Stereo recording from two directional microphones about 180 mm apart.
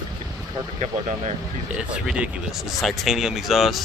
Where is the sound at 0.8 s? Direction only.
40° right (ahead or behind).